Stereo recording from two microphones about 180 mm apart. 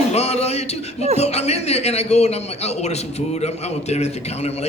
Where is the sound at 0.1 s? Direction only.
35° left (ahead or behind).